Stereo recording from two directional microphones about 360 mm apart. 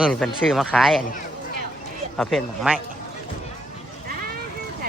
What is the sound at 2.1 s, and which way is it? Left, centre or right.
Speech, centre.